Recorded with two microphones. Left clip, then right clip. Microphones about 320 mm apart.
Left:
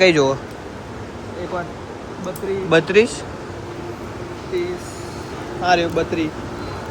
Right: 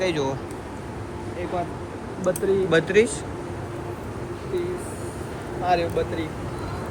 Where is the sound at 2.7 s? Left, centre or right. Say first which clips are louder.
Left 7 dB; centre.